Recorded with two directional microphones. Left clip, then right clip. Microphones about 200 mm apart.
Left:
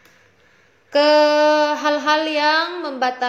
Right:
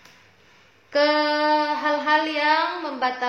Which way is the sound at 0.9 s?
20° left (ahead or behind).